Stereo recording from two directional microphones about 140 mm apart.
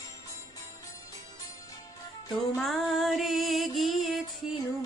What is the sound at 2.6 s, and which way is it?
Music, centre (ahead or behind).